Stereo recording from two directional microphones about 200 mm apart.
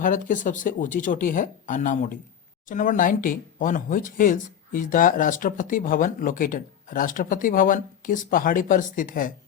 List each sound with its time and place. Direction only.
0.0 s speech: 40° left (ahead or behind)